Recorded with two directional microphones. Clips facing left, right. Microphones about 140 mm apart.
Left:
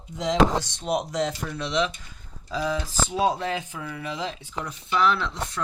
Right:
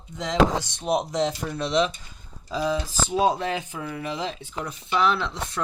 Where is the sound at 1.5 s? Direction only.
40° right (ahead or behind).